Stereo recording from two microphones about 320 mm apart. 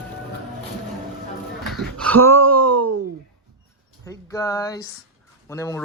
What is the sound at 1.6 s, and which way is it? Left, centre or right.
Speech, centre.